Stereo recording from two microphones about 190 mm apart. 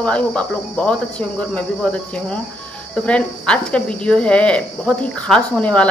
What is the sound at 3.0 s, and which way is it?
Speech, 5° left (ahead or behind).